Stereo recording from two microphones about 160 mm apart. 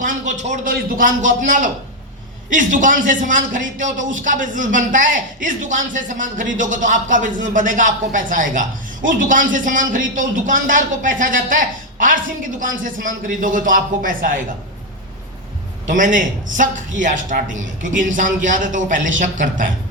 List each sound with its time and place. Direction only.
0.0 s a man's voice: 50° right (ahead or behind)
15.9 s speech: 55° right (ahead or behind)